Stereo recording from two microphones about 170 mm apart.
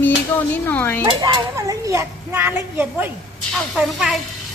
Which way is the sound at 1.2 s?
25° right (ahead or behind).